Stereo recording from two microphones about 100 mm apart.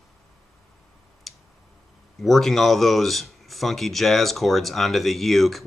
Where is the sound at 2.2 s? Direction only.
Centre (ahead or behind).